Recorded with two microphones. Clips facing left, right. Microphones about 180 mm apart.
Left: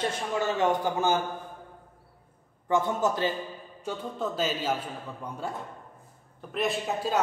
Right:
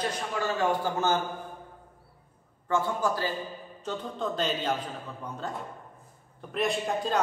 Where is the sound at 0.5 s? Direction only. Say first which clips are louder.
Even; 20° left (ahead or behind).